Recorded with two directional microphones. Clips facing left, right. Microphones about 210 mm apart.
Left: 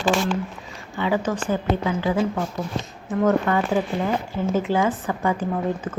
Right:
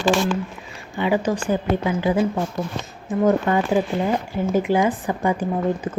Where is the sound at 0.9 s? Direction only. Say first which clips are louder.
Right 2 dB; 15° right (ahead or behind).